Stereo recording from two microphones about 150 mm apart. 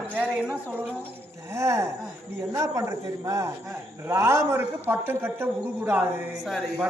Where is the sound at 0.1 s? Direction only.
10° right (ahead or behind).